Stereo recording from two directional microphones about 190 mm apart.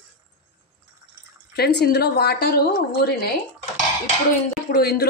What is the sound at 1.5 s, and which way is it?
Speech, 55° left (ahead or behind).